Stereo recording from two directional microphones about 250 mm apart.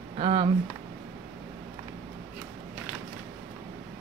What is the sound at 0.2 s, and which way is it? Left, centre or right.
Speech, right.